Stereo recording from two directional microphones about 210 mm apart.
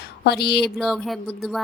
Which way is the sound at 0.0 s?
50° left (ahead or behind).